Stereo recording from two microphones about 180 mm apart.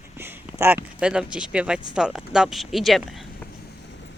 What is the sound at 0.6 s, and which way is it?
A woman's voice, 10° right (ahead or behind).